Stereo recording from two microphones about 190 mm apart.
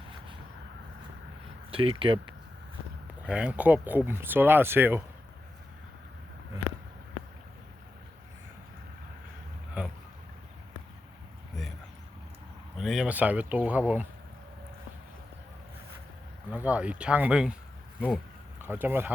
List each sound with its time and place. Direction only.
1.7 s speech: 30° right (ahead or behind)
3.2 s speech: 5° right (ahead or behind)
9.8 s boat: 5° right (ahead or behind)
12.7 s speech: centre (ahead or behind)
16.5 s speech: 10° right (ahead or behind)
18.6 s speech: 10° right (ahead or behind)